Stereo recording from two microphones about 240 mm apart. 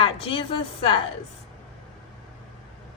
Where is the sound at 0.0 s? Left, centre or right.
Left.